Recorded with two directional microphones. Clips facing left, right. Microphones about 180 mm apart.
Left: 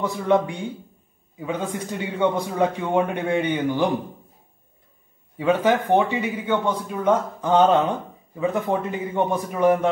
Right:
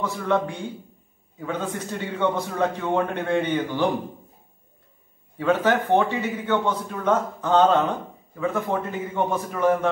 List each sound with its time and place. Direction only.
0.0 s a man's voice: 15° left (ahead or behind)
5.4 s a man's voice: 15° left (ahead or behind)